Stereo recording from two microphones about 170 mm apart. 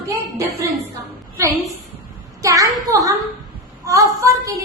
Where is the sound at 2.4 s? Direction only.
20° right (ahead or behind).